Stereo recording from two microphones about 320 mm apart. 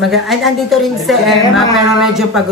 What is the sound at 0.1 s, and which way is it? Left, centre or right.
A woman's voice, centre.